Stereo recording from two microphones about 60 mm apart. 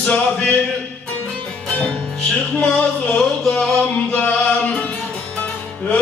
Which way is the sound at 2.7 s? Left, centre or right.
Centre.